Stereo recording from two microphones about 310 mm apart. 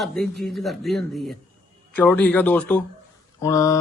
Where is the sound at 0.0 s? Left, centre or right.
Centre.